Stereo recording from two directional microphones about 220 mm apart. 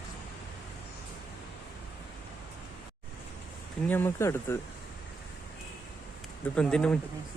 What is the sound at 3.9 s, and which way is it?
Speech, 10° left (ahead or behind).